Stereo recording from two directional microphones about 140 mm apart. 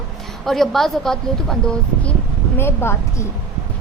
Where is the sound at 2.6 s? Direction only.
15° left (ahead or behind).